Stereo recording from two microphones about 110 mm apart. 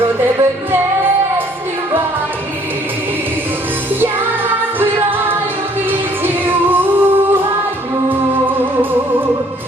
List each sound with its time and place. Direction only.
5.9 s music: 15° right (ahead or behind)